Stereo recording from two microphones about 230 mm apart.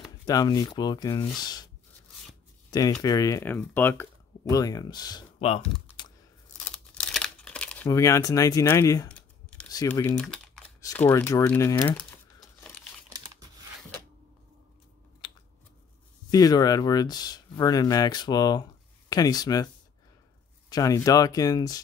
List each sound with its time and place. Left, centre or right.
0.2 s speech: centre
2.7 s speech: centre
5.9 s typing: centre
6.6 s crumpling: centre
9.7 s speech: centre
12.4 s crumpling: centre
13.1 s a sound: centre
16.3 s speech: centre
20.7 s speech: centre